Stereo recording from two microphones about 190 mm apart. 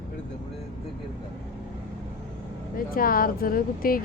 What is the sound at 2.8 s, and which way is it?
Speech, 50° left (ahead or behind).